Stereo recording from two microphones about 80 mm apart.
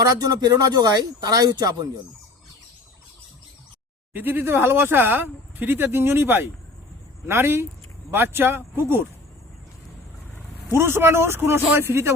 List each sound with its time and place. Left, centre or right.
0.0 s speech: right
4.1 s speech: right
10.7 s speech: right